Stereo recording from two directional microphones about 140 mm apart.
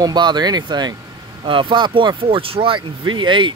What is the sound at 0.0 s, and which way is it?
Speech, 30° right (ahead or behind).